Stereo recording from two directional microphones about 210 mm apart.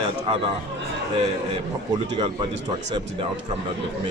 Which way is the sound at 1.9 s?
25° right (ahead or behind).